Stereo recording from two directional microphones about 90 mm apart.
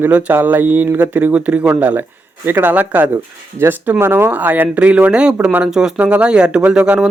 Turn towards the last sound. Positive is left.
turn(degrees=-10)  # may be behind; listen again after turning